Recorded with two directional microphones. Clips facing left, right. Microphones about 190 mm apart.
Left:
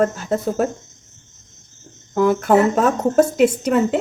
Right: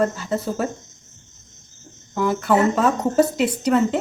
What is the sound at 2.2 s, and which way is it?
Speech, 50° left (ahead or behind).